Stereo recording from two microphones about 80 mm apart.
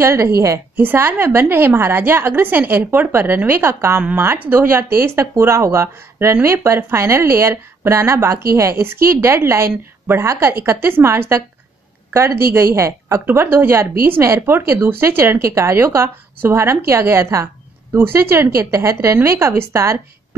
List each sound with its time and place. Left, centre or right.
0.0 s a woman's voice: right
0.7 s a woman's voice: right